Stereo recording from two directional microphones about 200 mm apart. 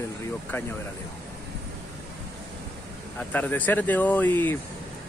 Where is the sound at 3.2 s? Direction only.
10° left (ahead or behind).